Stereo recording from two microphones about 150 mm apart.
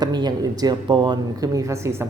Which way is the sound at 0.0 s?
30° right (ahead or behind).